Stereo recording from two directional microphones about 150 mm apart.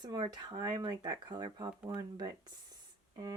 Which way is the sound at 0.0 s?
30° right (ahead or behind).